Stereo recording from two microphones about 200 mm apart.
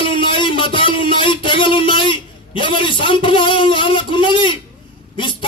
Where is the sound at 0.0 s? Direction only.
25° left (ahead or behind).